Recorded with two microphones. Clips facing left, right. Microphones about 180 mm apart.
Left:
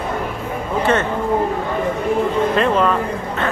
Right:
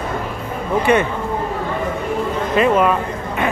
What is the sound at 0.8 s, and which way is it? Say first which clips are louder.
Speech: right 2 dB; 15° right (ahead or behind).